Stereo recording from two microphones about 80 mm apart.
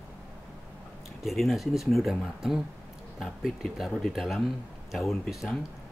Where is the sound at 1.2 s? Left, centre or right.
Centre.